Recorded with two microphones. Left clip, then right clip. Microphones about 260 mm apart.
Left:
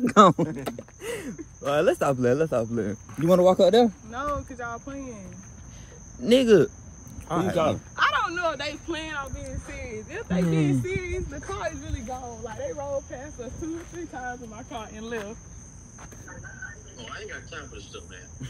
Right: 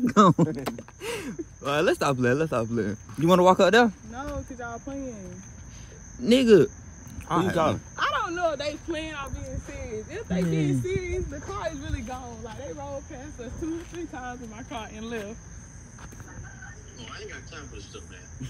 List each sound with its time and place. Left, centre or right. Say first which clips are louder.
0.0 s speech: left 3 dB; centre
3.3 s speech: even; centre
4.1 s a sound: left 6 dB; left
6.2 s speech: even; centre
7.5 s speech: left 3 dB; right
7.9 s a sound: left 3 dB; left
10.6 s speech: left 1 dB; left
11.5 s a sound: even; right
12.4 s speech: left 7 dB; centre
17.0 s speech: left 2 dB; centre